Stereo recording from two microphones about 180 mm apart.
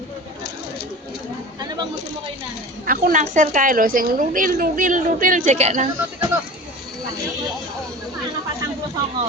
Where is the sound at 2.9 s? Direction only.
45° right (ahead or behind).